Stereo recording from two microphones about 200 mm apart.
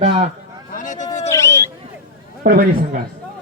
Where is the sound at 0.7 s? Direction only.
40° left (ahead or behind).